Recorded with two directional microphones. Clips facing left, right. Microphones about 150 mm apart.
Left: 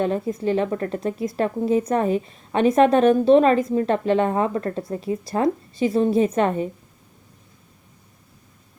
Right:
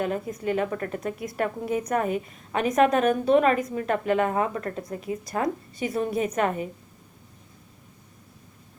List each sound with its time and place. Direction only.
0.0 s a woman's voice: 30° left (ahead or behind)